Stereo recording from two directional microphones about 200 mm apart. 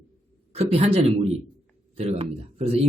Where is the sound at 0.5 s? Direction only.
30° right (ahead or behind).